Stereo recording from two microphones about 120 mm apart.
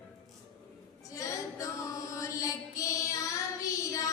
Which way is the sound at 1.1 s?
25° left (ahead or behind).